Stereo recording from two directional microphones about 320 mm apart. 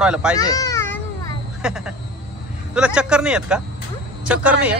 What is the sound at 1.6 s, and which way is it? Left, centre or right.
Speech, centre.